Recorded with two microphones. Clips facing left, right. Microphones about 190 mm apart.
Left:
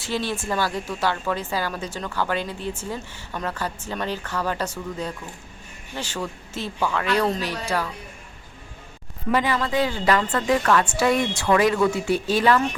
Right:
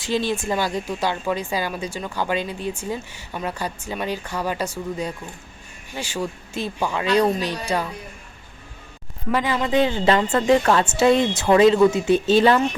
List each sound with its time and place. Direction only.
0.0 s a woman's voice: 15° right (ahead or behind)
9.6 s a woman's voice: 20° right (ahead or behind)